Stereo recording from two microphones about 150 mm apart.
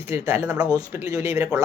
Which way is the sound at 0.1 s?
15° right (ahead or behind).